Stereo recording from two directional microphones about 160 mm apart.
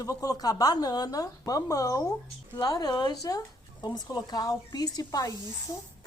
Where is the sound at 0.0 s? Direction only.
25° left (ahead or behind).